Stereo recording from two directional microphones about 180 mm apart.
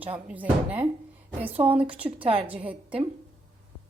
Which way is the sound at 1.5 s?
30° right (ahead or behind).